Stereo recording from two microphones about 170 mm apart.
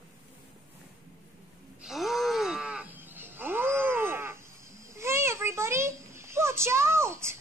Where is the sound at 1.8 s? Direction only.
Centre (ahead or behind).